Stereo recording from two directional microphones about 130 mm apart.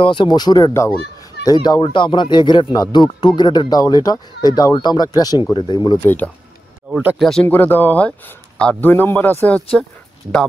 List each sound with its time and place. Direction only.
0.0 s speech: 40° left (ahead or behind)
6.0 s a man's voice: 10° left (ahead or behind)
6.9 s speech: 10° right (ahead or behind)
7.2 s speech: 5° left (ahead or behind)
7.4 s a man's voice: 15° left (ahead or behind)